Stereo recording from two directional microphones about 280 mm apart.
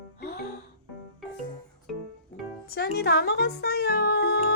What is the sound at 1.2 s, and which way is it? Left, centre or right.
Music, centre.